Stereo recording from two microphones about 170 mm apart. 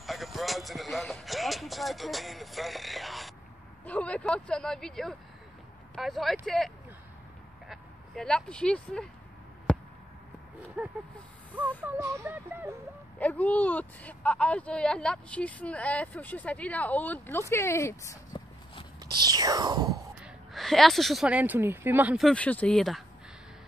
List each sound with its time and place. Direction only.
0.0 s speech: centre (ahead or behind)
9.7 s a sound: 5° left (ahead or behind)
10.8 s speech: 10° right (ahead or behind)
13.2 s speech: 10° left (ahead or behind)
19.1 s speech: 25° right (ahead or behind)
20.2 s speech: centre (ahead or behind)
22.3 s speech: 10° left (ahead or behind)